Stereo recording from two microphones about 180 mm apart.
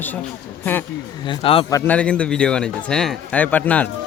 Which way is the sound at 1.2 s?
30° left (ahead or behind).